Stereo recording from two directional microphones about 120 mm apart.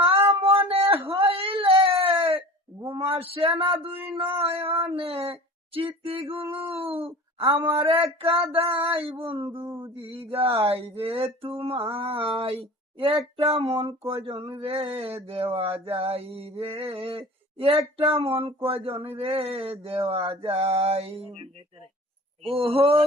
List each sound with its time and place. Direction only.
0.3 s a sound: 50° right (ahead or behind)
1.1 s whimper: 50° right (ahead or behind)
2.8 s speech: 50° right (ahead or behind)
5.3 s a sound: 50° right (ahead or behind)
6.7 s speech: 55° right (ahead or behind)
22.4 s speech: 50° right (ahead or behind)